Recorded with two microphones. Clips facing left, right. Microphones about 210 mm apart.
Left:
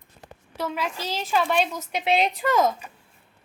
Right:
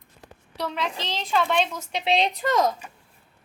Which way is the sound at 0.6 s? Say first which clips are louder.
Even; 5° left (ahead or behind).